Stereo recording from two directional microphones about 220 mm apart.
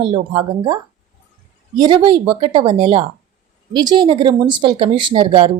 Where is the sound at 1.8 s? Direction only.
20° right (ahead or behind).